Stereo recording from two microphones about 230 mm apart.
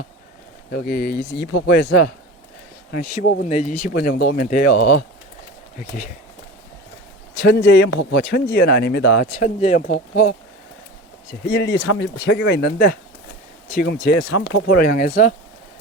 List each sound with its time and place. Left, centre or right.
0.7 s speech: left
2.9 s speech: left
7.3 s speech: left
11.4 s speech: left